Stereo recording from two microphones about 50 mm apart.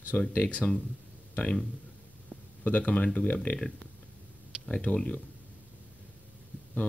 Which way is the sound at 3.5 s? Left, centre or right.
Left.